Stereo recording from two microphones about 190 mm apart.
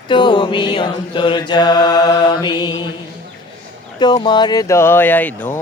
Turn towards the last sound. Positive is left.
turn(degrees=10)  # may be behind; listen again after turning